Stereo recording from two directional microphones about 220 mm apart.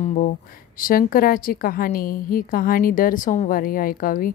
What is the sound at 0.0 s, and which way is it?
A woman's voice, 35° left (ahead or behind).